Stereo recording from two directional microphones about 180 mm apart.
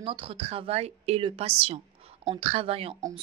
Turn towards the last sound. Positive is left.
turn(degrees=-30)  # may be behind; listen again after turning